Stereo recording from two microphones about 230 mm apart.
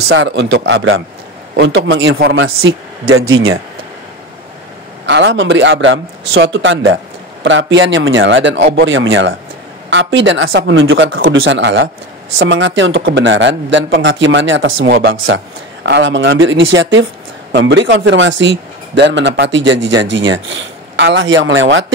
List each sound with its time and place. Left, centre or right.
0.1 s speech: right
2.3 s speech: right
5.0 s a man's voice: right